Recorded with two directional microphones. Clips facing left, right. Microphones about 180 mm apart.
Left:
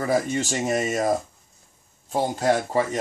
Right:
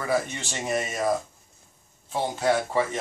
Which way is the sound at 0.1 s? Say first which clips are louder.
Left 3 dB; 40° left (ahead or behind).